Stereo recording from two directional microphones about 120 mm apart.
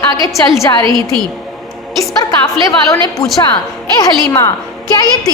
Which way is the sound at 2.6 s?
25° left (ahead or behind).